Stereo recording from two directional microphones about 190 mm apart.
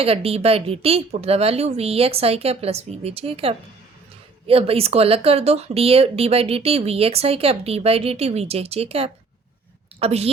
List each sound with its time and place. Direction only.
0.0 s speech: 30° right (ahead or behind)